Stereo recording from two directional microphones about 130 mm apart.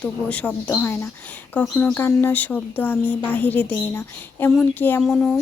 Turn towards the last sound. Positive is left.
turn(degrees=5)  # may be behind; listen again after turning